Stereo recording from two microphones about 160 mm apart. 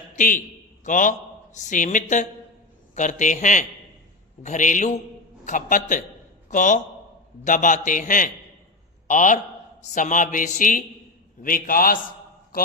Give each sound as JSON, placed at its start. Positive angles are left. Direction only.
{"t": 0.2, "sound": "a man's voice", "side_deg": 55}